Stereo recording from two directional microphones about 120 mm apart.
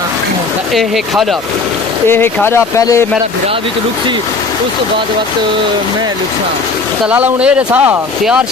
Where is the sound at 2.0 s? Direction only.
20° left (ahead or behind).